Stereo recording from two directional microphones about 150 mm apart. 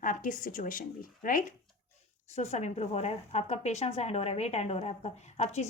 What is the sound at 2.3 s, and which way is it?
Speech, 50° left (ahead or behind).